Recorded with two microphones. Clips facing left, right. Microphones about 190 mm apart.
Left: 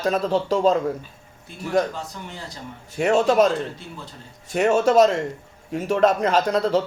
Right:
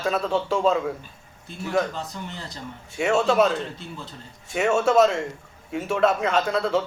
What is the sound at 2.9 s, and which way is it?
A man's voice, 35° left (ahead or behind).